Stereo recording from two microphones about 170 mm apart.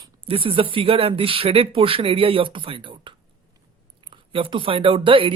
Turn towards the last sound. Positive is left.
turn(degrees=-30)  # may be behind; listen again after turning